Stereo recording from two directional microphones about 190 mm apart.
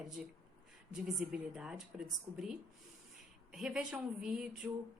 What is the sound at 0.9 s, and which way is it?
A woman's voice, 5° right (ahead or behind).